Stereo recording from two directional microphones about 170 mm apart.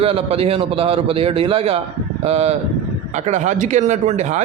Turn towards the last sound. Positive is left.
turn(degrees=-45)  # may be behind; listen again after turning